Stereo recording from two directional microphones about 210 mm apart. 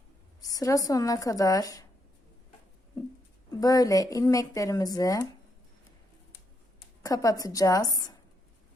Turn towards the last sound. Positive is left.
turn(degrees=15)  # may be behind; listen again after turning